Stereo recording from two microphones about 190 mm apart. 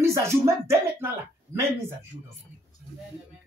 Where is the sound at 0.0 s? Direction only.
15° right (ahead or behind).